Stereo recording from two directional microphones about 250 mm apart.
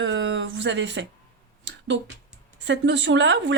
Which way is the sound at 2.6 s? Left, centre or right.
Right.